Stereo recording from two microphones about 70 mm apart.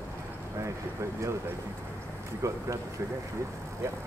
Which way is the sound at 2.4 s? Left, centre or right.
Right.